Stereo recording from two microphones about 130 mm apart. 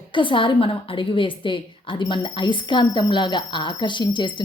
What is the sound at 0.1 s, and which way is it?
A woman's voice, 40° left (ahead or behind).